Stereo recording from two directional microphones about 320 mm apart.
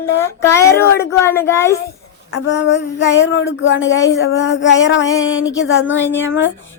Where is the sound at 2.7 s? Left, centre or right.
Left.